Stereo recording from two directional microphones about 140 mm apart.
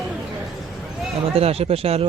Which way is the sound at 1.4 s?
45° right (ahead or behind).